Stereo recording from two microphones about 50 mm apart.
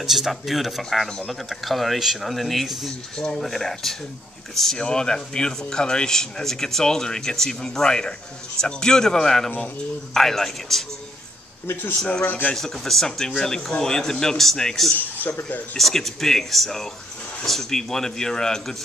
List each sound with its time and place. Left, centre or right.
0.0 s speech: centre
4.7 s speech: centre
11.6 s speech: left
12.5 s speech: centre
15.0 s speech: left
15.8 s speech: centre